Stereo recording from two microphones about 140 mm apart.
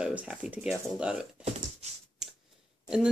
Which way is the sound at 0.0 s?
10° right (ahead or behind).